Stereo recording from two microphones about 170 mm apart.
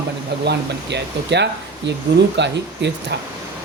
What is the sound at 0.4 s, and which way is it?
Speech, 90° right.